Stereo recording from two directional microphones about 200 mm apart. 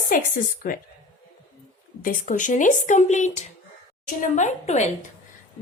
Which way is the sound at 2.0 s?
40° left (ahead or behind).